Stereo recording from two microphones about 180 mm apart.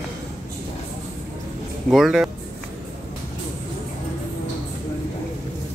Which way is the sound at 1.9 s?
Centre (ahead or behind).